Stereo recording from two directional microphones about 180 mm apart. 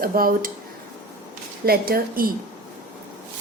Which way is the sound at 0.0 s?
55° right (ahead or behind).